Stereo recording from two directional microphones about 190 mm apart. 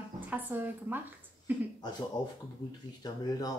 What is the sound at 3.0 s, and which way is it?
Speech, 20° left (ahead or behind).